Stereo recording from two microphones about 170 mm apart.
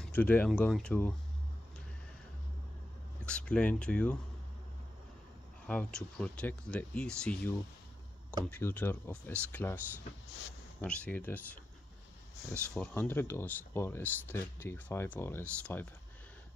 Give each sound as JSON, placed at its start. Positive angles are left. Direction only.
{"t": 0.0, "sound": "speech", "side_deg": 10}
{"t": 3.3, "sound": "speech", "side_deg": 5}
{"t": 5.7, "sound": "speech", "side_deg": 5}
{"t": 10.8, "sound": "speech", "side_deg": 5}
{"t": 12.7, "sound": "speech", "side_deg": 10}